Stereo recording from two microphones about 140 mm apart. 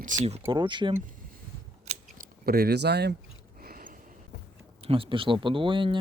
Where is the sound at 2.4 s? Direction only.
90° right.